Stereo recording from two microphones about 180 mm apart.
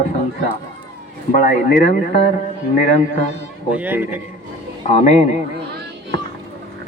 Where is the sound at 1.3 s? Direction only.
50° left (ahead or behind).